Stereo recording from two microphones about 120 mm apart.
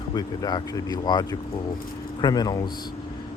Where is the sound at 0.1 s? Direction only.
35° left (ahead or behind).